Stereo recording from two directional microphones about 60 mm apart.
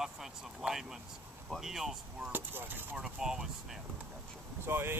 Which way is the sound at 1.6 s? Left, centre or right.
Centre.